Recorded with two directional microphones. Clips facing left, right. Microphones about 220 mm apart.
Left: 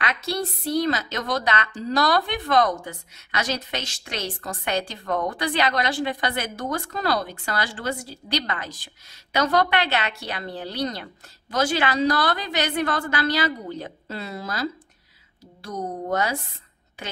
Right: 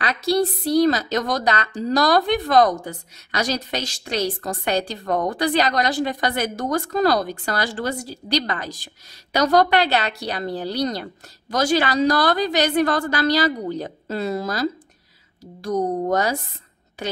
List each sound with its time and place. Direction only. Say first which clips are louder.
0.0 s a woman's voice: right 7 dB; 35° right (ahead or behind)